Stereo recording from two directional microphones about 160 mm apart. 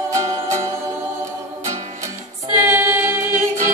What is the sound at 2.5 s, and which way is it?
Female singing, 15° right (ahead or behind).